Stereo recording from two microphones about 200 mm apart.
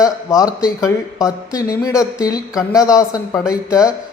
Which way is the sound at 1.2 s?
5° right (ahead or behind).